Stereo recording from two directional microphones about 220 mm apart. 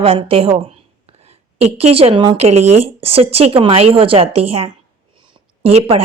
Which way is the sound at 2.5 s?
90° right.